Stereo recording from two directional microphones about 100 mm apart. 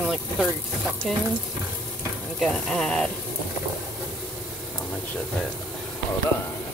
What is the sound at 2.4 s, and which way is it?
Speech, centre (ahead or behind).